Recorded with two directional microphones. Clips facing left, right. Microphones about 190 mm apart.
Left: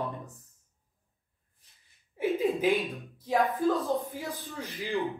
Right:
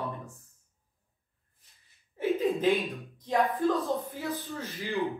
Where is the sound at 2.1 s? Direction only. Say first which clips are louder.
Even; 10° left (ahead or behind).